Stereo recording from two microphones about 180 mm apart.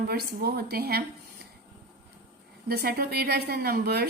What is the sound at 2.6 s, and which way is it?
A woman's voice, 60° right (ahead or behind).